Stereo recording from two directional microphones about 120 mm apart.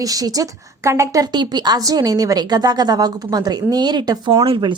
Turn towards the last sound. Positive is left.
turn(degrees=-40)  # may be behind; listen again after turning